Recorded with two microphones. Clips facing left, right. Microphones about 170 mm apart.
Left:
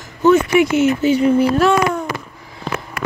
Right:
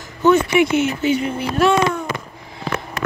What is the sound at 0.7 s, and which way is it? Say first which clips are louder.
Speech: left 3 dB; 35° left (ahead or behind).